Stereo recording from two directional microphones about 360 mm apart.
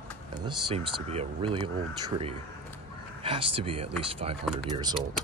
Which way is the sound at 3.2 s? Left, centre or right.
Centre.